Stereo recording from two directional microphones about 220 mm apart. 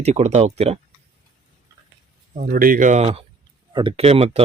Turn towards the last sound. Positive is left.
turn(degrees=-30)  # may be behind; listen again after turning